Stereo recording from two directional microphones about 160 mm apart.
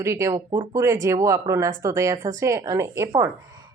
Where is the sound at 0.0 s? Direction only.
15° right (ahead or behind).